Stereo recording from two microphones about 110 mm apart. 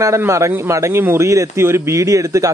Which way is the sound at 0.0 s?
25° right (ahead or behind).